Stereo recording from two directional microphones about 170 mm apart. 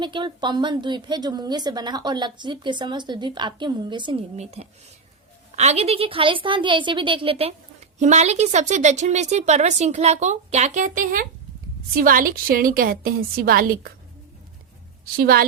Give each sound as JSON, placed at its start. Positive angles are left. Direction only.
{"t": 0.0, "sound": "speech", "side_deg": -30}
{"t": 4.4, "sound": "a woman's voice", "side_deg": -40}
{"t": 15.1, "sound": "a woman's voice", "side_deg": -60}